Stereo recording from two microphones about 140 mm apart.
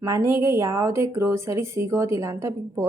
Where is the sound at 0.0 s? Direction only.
20° right (ahead or behind).